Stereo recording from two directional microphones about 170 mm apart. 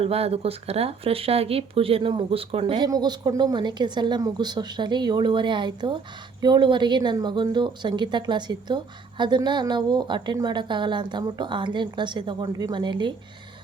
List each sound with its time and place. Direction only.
0.0 s a woman's voice: 35° right (ahead or behind)